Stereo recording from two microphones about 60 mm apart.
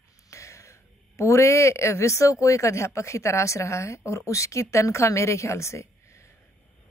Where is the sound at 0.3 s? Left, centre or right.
Left.